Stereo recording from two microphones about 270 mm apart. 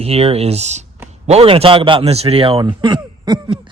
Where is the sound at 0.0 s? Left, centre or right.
Right.